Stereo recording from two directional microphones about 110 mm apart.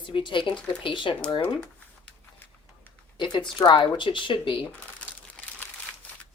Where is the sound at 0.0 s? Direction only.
45° left (ahead or behind).